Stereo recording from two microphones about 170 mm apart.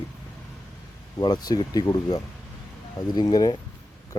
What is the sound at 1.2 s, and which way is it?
Speech, 25° left (ahead or behind).